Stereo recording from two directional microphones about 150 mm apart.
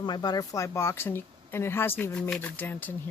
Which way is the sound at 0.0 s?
30° left (ahead or behind).